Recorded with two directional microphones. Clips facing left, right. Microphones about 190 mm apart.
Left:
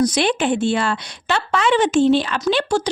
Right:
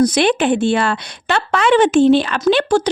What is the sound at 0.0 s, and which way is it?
A woman's voice, 60° right (ahead or behind).